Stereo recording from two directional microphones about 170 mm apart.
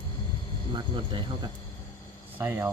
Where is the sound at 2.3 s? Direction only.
15° right (ahead or behind).